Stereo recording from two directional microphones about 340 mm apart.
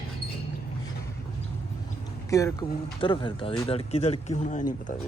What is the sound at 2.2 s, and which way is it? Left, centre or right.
Speech, centre.